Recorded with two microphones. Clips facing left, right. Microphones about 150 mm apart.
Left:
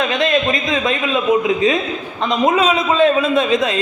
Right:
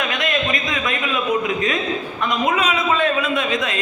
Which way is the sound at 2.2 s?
25° left (ahead or behind).